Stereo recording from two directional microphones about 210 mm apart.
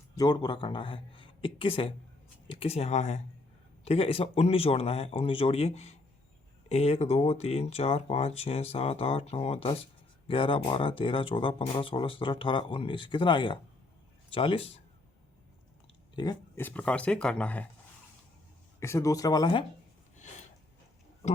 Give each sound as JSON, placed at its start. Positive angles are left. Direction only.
{"t": 0.2, "sound": "a man's voice", "side_deg": 20}
{"t": 16.1, "sound": "speech", "side_deg": 20}
{"t": 18.8, "sound": "speech", "side_deg": 15}